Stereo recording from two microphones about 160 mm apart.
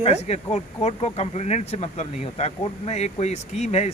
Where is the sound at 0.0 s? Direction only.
40° left (ahead or behind).